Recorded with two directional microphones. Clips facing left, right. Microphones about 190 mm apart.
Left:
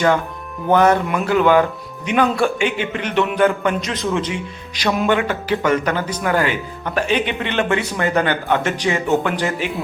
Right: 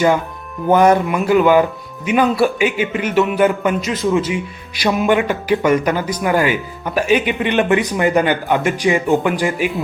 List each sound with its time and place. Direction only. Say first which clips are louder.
0.7 s a man's voice: right 2 dB; 10° right (ahead or behind)